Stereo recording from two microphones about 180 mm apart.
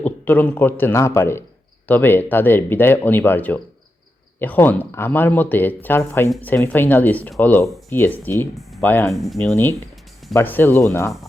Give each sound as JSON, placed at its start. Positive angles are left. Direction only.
{"t": 0.0, "sound": "speech", "side_deg": 10}
{"t": 9.0, "sound": "speech", "side_deg": 0}
{"t": 10.3, "sound": "speech", "side_deg": 10}